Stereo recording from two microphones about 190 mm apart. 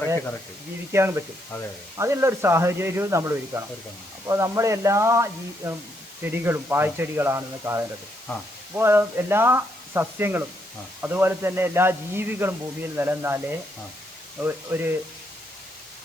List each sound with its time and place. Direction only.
0.9 s speech: 15° right (ahead or behind)